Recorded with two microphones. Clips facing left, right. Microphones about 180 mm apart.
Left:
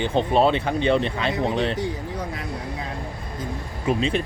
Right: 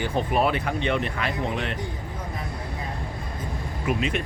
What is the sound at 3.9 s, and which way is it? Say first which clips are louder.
Speech: left 4 dB; 30° left (ahead or behind).